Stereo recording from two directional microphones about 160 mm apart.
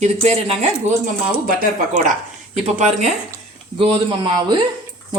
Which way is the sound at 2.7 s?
45° right (ahead or behind).